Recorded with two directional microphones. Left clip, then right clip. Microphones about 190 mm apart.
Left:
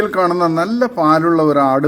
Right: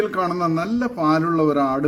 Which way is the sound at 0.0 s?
15° left (ahead or behind).